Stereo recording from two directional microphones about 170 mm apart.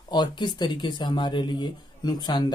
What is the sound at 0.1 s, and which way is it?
Speech, 25° left (ahead or behind).